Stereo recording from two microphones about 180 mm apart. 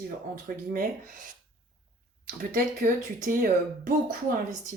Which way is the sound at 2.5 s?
50° right (ahead or behind).